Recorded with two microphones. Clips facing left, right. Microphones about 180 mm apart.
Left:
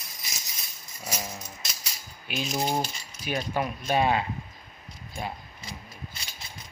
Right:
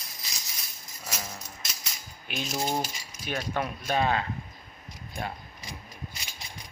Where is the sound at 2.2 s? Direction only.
10° left (ahead or behind).